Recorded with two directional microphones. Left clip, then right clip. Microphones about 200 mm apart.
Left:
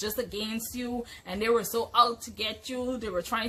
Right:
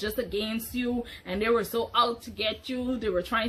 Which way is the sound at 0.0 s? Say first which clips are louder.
Right 2 dB; 15° left (ahead or behind).